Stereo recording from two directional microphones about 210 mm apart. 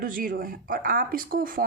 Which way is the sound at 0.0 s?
40° right (ahead or behind).